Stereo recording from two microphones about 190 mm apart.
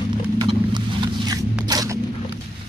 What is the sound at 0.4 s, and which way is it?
Vehicle, 20° right (ahead or behind).